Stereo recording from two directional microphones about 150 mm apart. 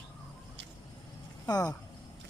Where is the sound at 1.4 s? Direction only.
25° left (ahead or behind).